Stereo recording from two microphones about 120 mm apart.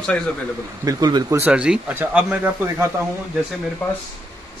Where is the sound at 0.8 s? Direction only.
35° right (ahead or behind).